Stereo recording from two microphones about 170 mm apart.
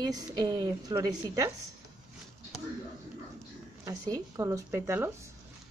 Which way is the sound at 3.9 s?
20° right (ahead or behind).